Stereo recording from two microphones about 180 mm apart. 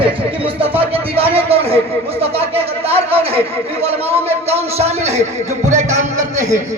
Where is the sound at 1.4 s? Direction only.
30° right (ahead or behind).